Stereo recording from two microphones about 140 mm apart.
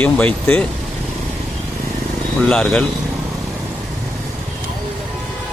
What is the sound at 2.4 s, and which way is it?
Speech, 5° left (ahead or behind).